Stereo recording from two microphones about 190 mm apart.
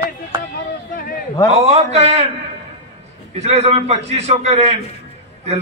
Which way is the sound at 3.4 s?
35° right (ahead or behind).